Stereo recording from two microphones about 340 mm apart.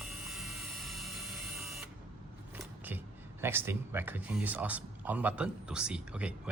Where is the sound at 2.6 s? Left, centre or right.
Centre.